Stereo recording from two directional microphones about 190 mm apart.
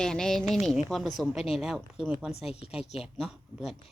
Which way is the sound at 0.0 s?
5° left (ahead or behind).